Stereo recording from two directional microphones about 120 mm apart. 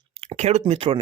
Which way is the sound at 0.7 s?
55° right (ahead or behind).